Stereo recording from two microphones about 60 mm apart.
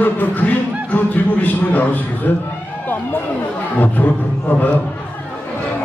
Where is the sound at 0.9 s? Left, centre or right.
Left.